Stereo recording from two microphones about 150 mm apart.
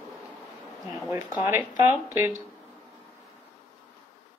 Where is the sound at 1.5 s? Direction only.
15° right (ahead or behind).